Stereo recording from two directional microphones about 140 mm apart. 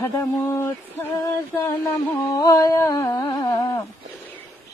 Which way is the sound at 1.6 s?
15° left (ahead or behind).